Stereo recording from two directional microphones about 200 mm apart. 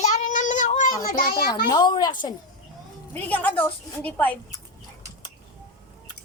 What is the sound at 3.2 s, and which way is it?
Speech, 10° left (ahead or behind).